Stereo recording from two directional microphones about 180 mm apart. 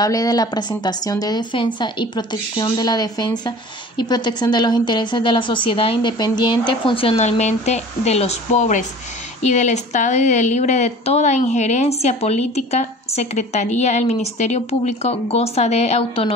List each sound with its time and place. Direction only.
0.0 s a woman's voice: 20° left (ahead or behind)